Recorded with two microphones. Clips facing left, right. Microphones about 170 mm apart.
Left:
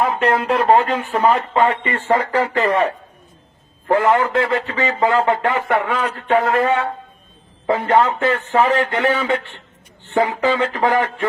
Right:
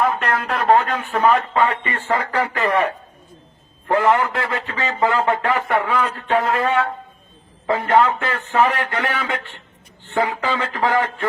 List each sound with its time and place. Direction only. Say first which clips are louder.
0.0 s speech: left 3 dB; 25° left (ahead or behind)
4.0 s speech: left 1 dB; 25° left (ahead or behind)